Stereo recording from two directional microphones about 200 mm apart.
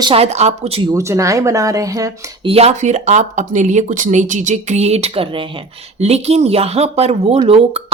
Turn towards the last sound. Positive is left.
turn(degrees=-30)  # may be behind; listen again after turning